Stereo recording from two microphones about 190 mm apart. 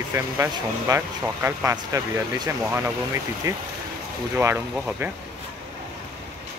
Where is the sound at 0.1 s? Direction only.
15° right (ahead or behind).